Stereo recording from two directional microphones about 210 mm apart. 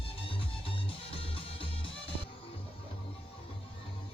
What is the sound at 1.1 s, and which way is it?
Music, 25° left (ahead or behind).